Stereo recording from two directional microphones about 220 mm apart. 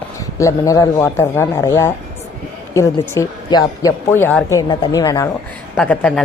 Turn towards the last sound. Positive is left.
turn(degrees=5)  # may be behind; listen again after turning